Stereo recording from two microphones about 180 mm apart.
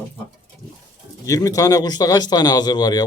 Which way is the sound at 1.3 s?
20° left (ahead or behind).